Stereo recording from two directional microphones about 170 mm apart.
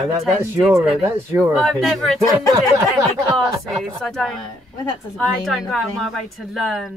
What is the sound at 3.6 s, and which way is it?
A woman's voice, centre (ahead or behind).